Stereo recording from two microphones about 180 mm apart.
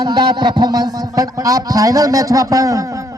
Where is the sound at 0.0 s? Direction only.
25° right (ahead or behind).